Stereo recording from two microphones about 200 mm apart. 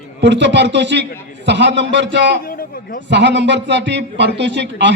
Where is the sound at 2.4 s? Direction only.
45° left (ahead or behind).